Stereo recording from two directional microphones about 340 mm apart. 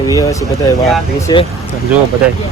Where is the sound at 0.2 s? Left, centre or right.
Centre.